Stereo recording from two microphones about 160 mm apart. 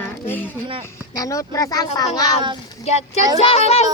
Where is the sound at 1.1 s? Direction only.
20° left (ahead or behind).